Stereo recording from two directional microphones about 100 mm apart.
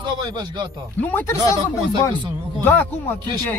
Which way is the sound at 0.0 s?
45° right (ahead or behind).